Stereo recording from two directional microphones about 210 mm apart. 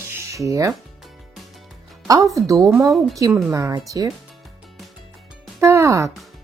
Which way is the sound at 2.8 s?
Centre (ahead or behind).